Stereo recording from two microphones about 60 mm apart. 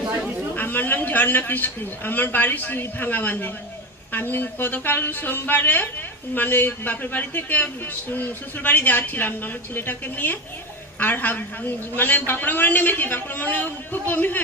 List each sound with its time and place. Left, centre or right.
0.5 s a man's voice: left